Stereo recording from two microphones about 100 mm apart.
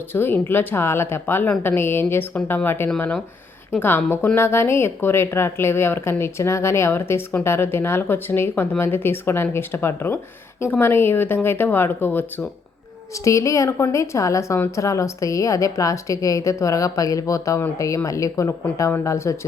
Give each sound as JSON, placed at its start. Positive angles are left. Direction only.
{"t": 0.1, "sound": "a woman's voice", "side_deg": 20}
{"t": 13.2, "sound": "a woman's voice", "side_deg": 30}